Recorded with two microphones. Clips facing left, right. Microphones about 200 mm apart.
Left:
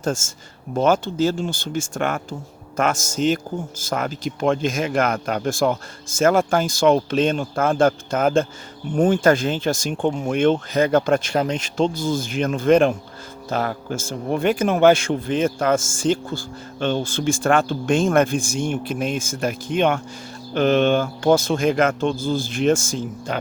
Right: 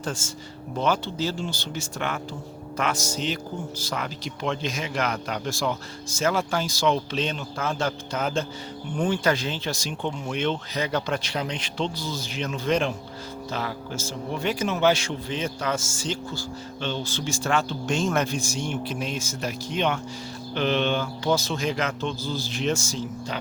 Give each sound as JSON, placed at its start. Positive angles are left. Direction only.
{"t": 0.0, "sound": "speech", "side_deg": 45}